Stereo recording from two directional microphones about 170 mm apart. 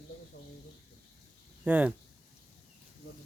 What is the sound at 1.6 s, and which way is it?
Speech, 10° right (ahead or behind).